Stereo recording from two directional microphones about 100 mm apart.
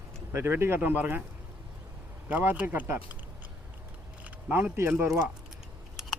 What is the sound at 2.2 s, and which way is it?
Speech, 20° right (ahead or behind).